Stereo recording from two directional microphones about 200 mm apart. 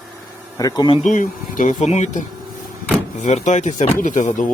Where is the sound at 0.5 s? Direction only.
20° left (ahead or behind).